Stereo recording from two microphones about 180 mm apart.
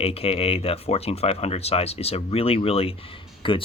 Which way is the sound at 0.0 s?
35° left (ahead or behind).